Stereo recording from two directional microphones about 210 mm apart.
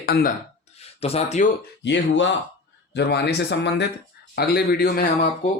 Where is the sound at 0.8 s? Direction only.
30° left (ahead or behind).